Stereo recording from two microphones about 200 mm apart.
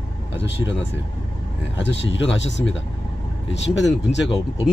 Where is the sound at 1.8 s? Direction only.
65° left (ahead or behind).